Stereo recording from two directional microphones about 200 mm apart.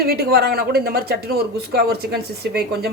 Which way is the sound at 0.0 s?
50° right (ahead or behind).